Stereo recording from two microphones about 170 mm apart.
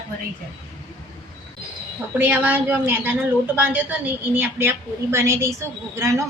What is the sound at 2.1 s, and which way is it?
A woman's voice, 10° right (ahead or behind).